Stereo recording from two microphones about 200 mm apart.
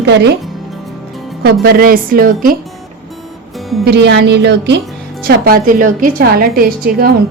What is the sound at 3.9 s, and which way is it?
Speech, 60° right (ahead or behind).